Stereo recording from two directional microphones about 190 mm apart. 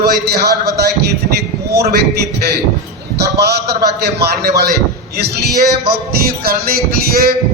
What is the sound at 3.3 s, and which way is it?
A man's voice, 60° right (ahead or behind).